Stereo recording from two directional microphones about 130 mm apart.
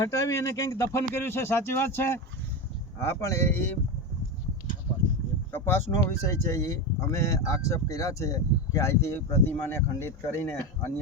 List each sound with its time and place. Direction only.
0.0 s speech: 25° left (ahead or behind)
5.5 s speech: 15° left (ahead or behind)